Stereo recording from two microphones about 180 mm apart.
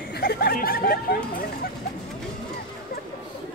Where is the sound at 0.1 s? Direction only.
60° left (ahead or behind).